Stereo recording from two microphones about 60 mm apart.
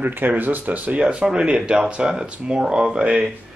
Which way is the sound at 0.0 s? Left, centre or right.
Right.